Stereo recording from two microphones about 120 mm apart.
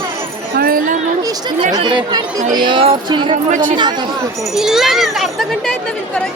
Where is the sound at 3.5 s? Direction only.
90° right.